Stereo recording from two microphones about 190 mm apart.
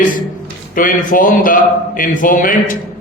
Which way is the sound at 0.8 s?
45° left (ahead or behind).